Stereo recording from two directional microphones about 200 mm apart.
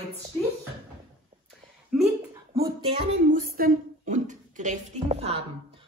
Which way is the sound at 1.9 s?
Centre (ahead or behind).